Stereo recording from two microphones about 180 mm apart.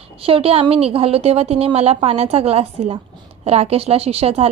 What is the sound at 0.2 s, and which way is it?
A woman's voice, 30° right (ahead or behind).